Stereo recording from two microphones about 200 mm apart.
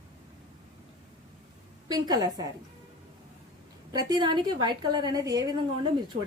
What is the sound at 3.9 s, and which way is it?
A woman's voice, 20° right (ahead or behind).